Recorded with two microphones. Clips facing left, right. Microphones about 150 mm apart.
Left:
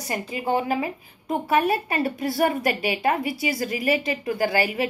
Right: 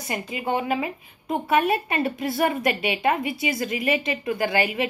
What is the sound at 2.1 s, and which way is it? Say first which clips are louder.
A woman's voice: left 1 dB; 35° left (ahead or behind).